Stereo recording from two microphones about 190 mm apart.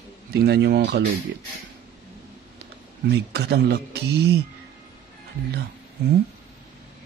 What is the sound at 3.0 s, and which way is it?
Speech, 60° right (ahead or behind).